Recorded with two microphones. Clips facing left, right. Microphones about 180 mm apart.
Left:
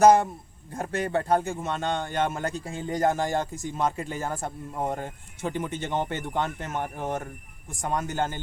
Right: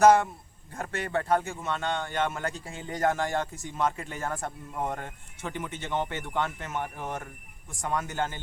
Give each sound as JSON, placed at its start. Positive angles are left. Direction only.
{"t": 0.0, "sound": "speech", "side_deg": 40}